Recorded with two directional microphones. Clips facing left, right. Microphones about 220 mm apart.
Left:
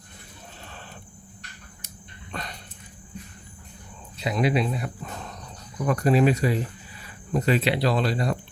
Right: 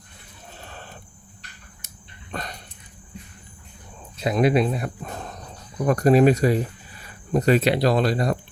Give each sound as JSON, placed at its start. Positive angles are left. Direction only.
{"t": 2.3, "sound": "dog", "side_deg": -45}
{"t": 4.2, "sound": "speech", "side_deg": -50}